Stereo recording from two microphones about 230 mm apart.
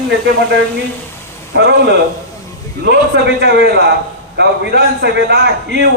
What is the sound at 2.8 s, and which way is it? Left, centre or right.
A man's voice, right.